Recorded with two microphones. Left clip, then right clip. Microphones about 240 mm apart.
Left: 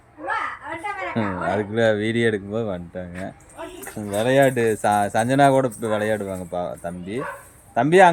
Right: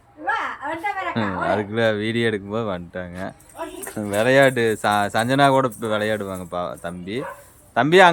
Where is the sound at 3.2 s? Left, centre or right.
Centre.